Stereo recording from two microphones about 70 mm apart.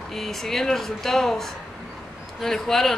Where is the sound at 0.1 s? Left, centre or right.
Centre.